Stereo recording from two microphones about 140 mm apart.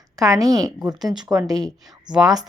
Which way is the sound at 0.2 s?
25° right (ahead or behind).